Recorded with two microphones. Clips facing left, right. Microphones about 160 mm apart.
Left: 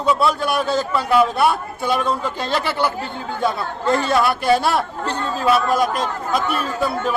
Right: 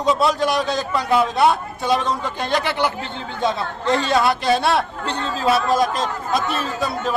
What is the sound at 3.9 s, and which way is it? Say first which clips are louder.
Speech: right 1 dB; 20° right (ahead or behind).